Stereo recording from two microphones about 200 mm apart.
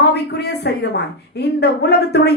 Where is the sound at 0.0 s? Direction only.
55° left (ahead or behind).